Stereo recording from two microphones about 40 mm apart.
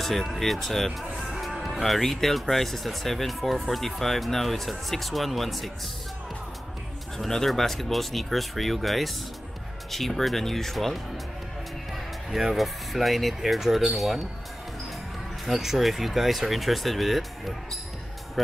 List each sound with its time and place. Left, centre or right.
0.0 s speech: centre
7.2 s speech: centre
12.3 s speech: centre
15.4 s speech: centre